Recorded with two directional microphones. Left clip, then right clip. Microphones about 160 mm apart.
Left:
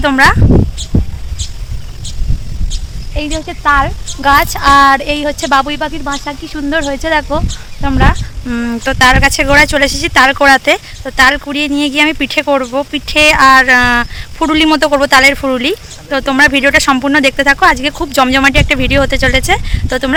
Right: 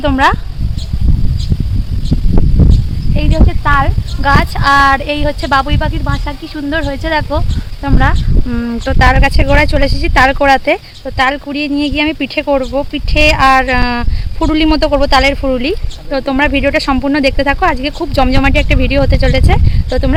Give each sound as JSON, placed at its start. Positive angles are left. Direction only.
{"t": 0.0, "sound": "speech", "side_deg": 5}
{"t": 3.2, "sound": "a woman's voice", "side_deg": 30}
{"t": 7.8, "sound": "speech", "side_deg": 20}